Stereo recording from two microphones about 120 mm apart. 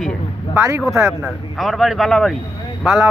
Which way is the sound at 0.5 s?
25° right (ahead or behind).